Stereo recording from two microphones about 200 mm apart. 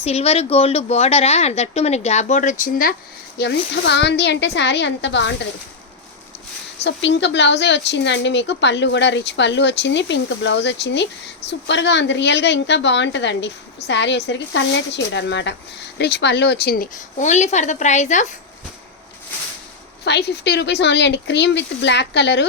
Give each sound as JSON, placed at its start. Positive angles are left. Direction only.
{"t": 0.0, "sound": "speech", "side_deg": 30}
{"t": 3.3, "sound": "speech", "side_deg": 55}
{"t": 6.8, "sound": "speech", "side_deg": 65}
{"t": 20.1, "sound": "speech", "side_deg": 55}